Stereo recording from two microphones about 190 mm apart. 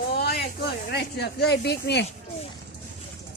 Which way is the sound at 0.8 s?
60° left (ahead or behind).